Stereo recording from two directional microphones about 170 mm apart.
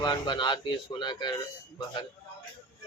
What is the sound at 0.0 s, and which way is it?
Speech, 25° left (ahead or behind).